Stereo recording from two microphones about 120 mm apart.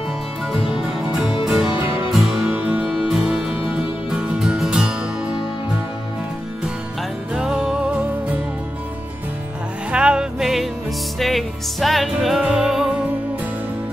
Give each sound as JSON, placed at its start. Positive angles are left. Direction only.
{"t": 0.5, "sound": "music", "side_deg": -5}
{"t": 1.8, "sound": "music", "side_deg": 50}
{"t": 2.0, "sound": "music", "side_deg": -5}
{"t": 7.3, "sound": "music", "side_deg": -5}
{"t": 9.8, "sound": "music", "side_deg": -10}